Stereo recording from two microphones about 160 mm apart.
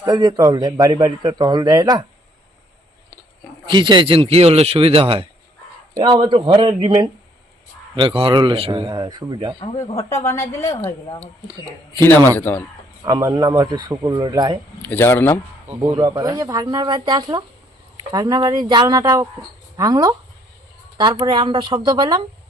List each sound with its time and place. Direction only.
0.0 s speech: 25° right (ahead or behind)
3.7 s a man's voice: 30° right (ahead or behind)
10.1 s a woman's voice: 15° left (ahead or behind)
12.4 s a woman's voice: 10° left (ahead or behind)
13.1 s speech: 25° right (ahead or behind)
14.8 s a woman's voice: 10° left (ahead or behind)
15.6 s speech: 10° right (ahead or behind)
16.0 s speech: 25° right (ahead or behind)
21.2 s speech: 30° right (ahead or behind)